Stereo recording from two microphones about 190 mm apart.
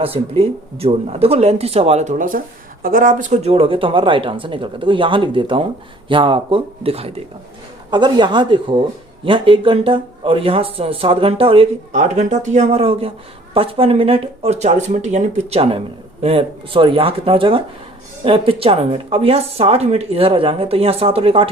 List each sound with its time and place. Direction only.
0.0 s speech: 30° right (ahead or behind)